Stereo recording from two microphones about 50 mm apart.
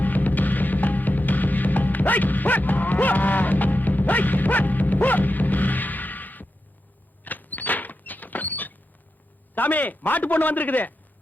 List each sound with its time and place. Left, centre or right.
0.0 s music: left
7.3 s creak: left
9.6 s a man's voice: left